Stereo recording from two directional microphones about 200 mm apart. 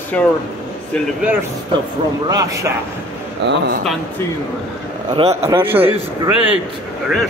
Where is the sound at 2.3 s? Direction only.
15° right (ahead or behind).